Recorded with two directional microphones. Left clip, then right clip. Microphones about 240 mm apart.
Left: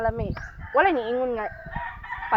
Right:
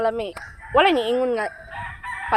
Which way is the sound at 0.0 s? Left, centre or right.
Right.